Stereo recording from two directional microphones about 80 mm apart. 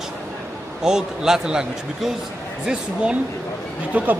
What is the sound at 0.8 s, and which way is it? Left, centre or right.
A man's voice, centre.